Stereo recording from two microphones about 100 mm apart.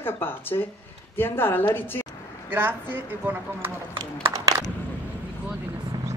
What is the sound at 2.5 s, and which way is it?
A woman's voice, 20° right (ahead or behind).